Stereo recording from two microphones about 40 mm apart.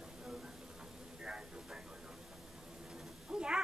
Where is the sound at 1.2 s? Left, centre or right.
Centre.